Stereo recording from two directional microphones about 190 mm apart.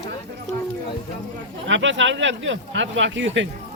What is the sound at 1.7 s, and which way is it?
Speech, 75° right (ahead or behind).